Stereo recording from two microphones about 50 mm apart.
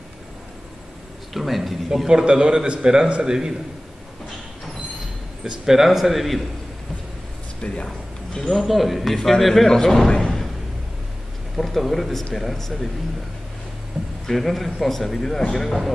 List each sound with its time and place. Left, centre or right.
1.3 s a man's voice: centre
2.0 s a man's voice: centre
5.4 s a man's voice: centre
7.6 s a man's voice: left
8.4 s a man's voice: centre
11.5 s a man's voice: centre
14.2 s a man's voice: centre